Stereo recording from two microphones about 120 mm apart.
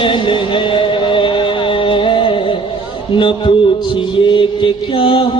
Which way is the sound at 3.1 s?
45° left (ahead or behind).